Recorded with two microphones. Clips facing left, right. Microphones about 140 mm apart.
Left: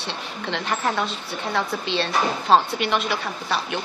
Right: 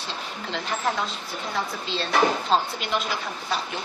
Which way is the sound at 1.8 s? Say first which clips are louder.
Even; 70° left (ahead or behind).